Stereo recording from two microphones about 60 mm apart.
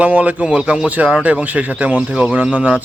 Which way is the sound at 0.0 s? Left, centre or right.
Right.